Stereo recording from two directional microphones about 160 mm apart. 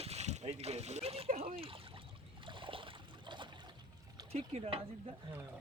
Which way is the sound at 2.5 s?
30° right (ahead or behind).